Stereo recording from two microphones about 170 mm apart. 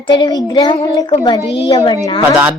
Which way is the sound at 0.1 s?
25° left (ahead or behind).